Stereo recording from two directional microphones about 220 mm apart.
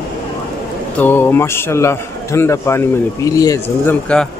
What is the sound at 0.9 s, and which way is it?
A man's voice, 10° left (ahead or behind).